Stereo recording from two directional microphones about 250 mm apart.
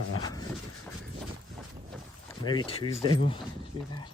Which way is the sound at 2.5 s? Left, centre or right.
Centre.